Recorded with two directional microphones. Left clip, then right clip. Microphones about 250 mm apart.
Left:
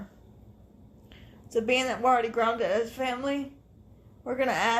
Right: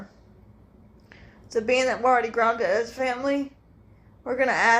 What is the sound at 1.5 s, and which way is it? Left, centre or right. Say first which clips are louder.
A woman's voice: right 4 dB; left.